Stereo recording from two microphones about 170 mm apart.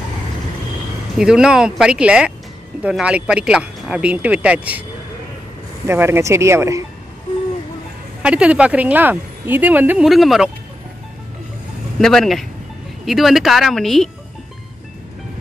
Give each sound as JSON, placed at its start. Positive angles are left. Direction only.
{"t": 1.1, "sound": "speech", "side_deg": -5}
{"t": 5.9, "sound": "speech", "side_deg": -15}
{"t": 8.2, "sound": "speech", "side_deg": -5}
{"t": 12.0, "sound": "speech", "side_deg": 0}